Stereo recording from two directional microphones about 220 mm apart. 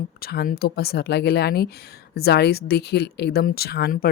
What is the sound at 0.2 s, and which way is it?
Speech, 45° left (ahead or behind).